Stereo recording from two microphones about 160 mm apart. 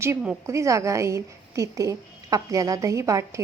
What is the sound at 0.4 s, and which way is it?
A woman's voice, 20° right (ahead or behind).